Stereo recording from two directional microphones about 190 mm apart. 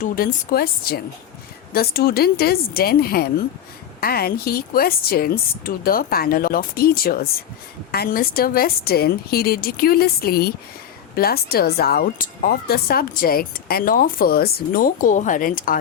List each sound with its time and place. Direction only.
0.0 s speech: 50° left (ahead or behind)